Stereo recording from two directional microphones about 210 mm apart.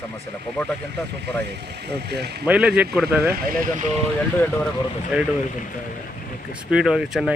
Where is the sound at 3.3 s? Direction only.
45° right (ahead or behind).